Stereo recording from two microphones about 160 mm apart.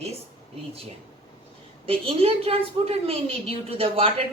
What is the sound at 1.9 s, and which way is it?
A woman's voice, 35° right (ahead or behind).